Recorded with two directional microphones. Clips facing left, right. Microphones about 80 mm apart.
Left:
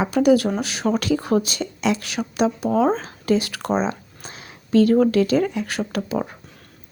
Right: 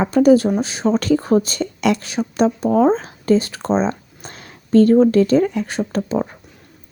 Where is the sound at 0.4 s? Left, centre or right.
Right.